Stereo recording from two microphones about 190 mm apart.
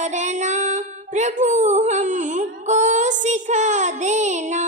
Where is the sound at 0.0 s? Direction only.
40° right (ahead or behind).